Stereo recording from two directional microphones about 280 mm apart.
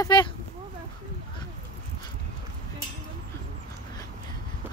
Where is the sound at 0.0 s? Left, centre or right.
Centre.